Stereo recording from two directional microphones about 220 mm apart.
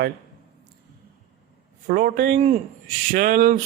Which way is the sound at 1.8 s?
40° right (ahead or behind).